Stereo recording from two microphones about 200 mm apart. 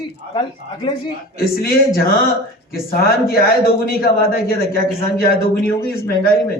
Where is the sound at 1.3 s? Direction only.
50° left (ahead or behind).